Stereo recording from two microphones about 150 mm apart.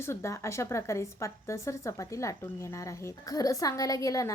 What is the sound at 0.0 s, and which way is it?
A woman's voice, 20° left (ahead or behind).